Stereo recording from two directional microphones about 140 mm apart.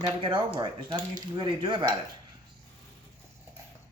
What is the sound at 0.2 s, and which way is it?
Speech, 35° right (ahead or behind).